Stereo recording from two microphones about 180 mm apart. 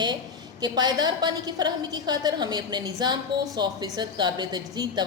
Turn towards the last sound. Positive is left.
turn(degrees=-25)  # may be behind; listen again after turning